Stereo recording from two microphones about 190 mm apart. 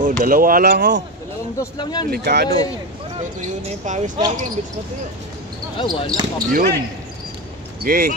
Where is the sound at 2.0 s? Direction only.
55° right (ahead or behind).